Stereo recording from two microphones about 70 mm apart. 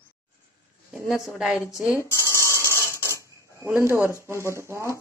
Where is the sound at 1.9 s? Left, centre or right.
Left.